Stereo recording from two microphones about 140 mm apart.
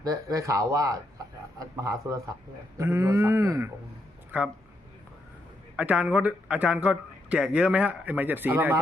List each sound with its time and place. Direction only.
0.0 s a sound: 25° right (ahead or behind)
4.3 s a man's voice: 10° right (ahead or behind)
5.7 s a man's voice: 10° right (ahead or behind)